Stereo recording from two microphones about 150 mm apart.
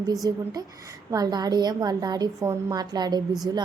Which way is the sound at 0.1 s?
25° right (ahead or behind).